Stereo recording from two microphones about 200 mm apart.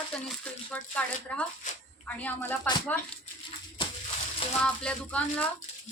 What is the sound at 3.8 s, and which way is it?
Crushing, 25° left (ahead or behind).